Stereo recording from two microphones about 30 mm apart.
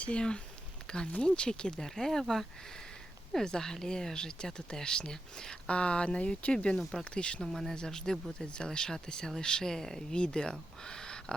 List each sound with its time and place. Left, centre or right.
0.1 s speech: left
5.6 s speech: left
7.5 s speech: centre
10.2 s speech: left